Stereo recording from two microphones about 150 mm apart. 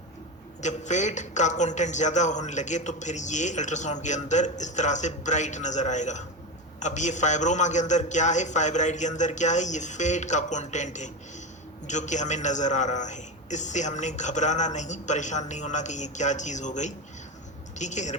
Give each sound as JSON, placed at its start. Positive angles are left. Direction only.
{"t": 0.6, "sound": "a man's voice", "side_deg": 55}